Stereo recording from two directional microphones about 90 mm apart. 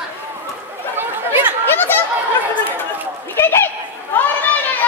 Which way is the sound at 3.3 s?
25° left (ahead or behind).